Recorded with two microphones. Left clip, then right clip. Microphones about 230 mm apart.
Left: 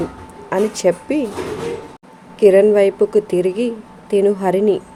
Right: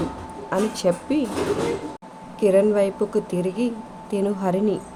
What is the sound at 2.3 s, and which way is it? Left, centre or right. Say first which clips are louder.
Speech: left 7 dB; left.